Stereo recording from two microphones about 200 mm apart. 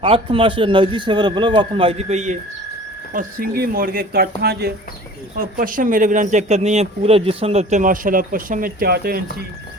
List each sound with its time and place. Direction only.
0.0 s speech: 25° right (ahead or behind); by 9.4 s 50° right (ahead or behind)